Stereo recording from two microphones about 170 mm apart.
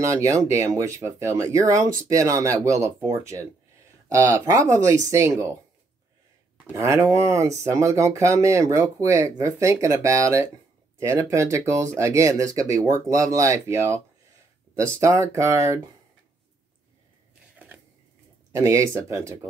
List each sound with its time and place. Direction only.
0.0 s speech: 20° right (ahead or behind)
6.7 s speech: 20° right (ahead or behind)
18.5 s speech: 20° right (ahead or behind)